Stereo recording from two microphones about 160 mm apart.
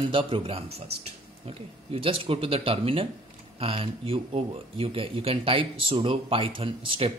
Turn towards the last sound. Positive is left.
turn(degrees=-35)  # may be behind; listen again after turning